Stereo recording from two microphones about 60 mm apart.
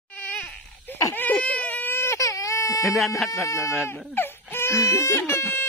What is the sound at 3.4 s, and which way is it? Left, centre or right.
Speech, left.